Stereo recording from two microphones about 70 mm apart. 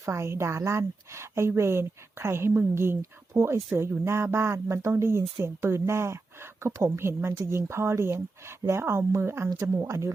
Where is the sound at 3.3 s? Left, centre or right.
Right.